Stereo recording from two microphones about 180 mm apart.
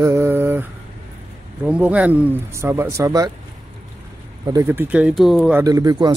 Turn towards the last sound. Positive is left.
turn(degrees=-20)  # may be behind; listen again after turning